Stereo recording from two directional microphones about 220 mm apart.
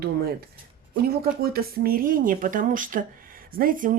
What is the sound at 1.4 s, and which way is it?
Speech, 45° right (ahead or behind).